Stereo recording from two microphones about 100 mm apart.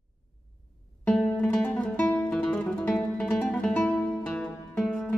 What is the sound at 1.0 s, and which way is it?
Music, 5° left (ahead or behind).